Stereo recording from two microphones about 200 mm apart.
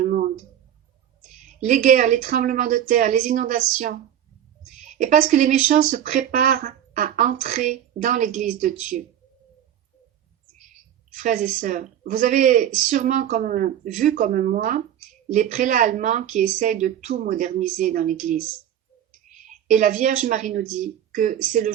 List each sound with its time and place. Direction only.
0.0 s a sound: 40° right (ahead or behind)
1.4 s speech: 40° right (ahead or behind)
11.1 s speech: 40° right (ahead or behind)
19.5 s speech: 40° right (ahead or behind)